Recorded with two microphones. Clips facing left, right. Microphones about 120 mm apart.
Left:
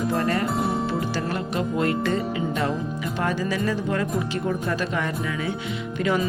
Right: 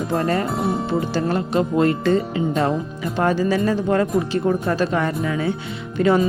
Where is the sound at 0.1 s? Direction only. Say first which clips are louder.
Right 6 dB; 30° right (ahead or behind).